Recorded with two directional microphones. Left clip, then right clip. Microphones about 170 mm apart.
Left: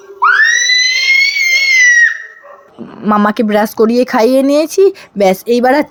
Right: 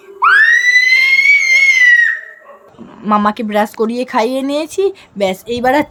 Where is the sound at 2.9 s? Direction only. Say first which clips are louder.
Left 1 dB; 20° left (ahead or behind).